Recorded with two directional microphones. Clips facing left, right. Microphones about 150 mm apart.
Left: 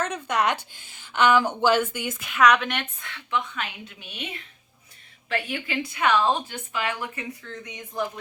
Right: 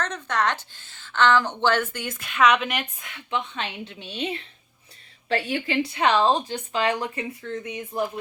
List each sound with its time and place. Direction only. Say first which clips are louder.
0.0 s a woman's voice: left 1 dB; 10° left (ahead or behind)
2.5 s a woman's voice: even; 5° right (ahead or behind)
3.0 s a woman's voice: left 1 dB; 20° right (ahead or behind)